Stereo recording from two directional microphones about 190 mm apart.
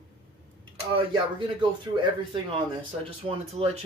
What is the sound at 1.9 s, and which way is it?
Speech, 20° right (ahead or behind).